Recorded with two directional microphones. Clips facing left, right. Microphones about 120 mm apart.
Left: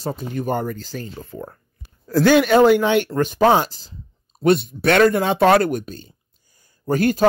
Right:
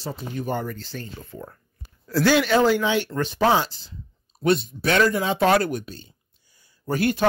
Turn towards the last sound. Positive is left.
turn(degrees=45)  # may be behind; listen again after turning